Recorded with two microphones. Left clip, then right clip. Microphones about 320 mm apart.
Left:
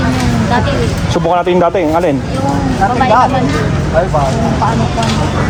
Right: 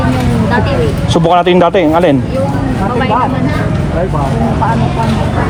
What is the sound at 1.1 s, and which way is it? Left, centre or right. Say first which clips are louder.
Speech: right 3 dB; right.